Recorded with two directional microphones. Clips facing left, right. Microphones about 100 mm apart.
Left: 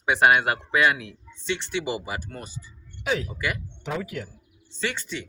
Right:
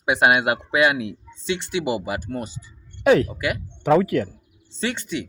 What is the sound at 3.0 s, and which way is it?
Speech, 60° right (ahead or behind).